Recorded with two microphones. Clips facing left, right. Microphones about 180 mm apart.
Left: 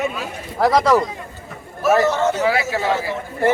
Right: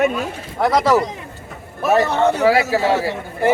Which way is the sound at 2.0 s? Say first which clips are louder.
Right 1 dB; 60° right (ahead or behind).